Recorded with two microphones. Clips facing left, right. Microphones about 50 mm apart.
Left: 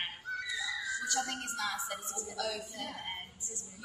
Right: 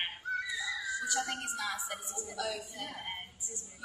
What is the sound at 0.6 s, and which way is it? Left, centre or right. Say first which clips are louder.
A woman's voice: even; centre.